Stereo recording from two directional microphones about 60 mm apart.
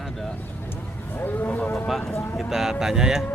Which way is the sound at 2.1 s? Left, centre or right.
Left.